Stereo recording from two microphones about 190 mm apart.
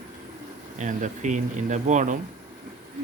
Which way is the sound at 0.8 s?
40° right (ahead or behind).